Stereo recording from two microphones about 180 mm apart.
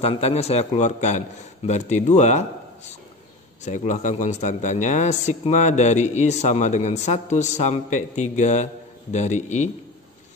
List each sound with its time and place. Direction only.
0.0 s speech: 35° left (ahead or behind)